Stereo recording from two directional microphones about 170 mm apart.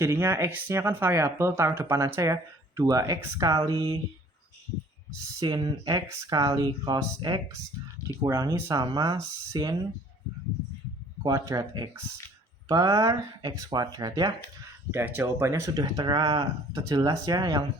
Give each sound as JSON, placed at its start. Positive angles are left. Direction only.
{"t": 0.0, "sound": "speech", "side_deg": -15}
{"t": 5.4, "sound": "speech", "side_deg": -20}
{"t": 11.2, "sound": "speech", "side_deg": -20}